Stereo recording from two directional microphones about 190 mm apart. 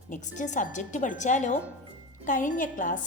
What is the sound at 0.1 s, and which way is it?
A woman's voice, 40° left (ahead or behind).